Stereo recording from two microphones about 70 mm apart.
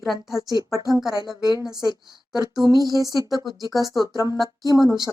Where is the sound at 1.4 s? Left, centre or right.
Left.